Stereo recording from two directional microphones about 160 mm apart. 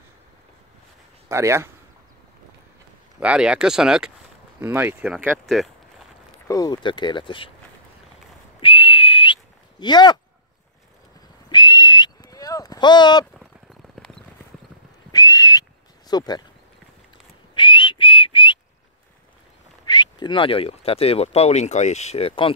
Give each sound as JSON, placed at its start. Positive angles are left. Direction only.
{"t": 1.3, "sound": "speech", "side_deg": -15}
{"t": 3.2, "sound": "speech", "side_deg": -5}
{"t": 6.4, "sound": "speech", "side_deg": 20}
{"t": 8.5, "sound": "whistle", "side_deg": 35}
{"t": 11.4, "sound": "a sound", "side_deg": 30}
{"t": 15.0, "sound": "whistle", "side_deg": 25}
{"t": 16.1, "sound": "speech", "side_deg": 25}
{"t": 17.6, "sound": "whistle", "side_deg": 30}
{"t": 19.9, "sound": "speech", "side_deg": 25}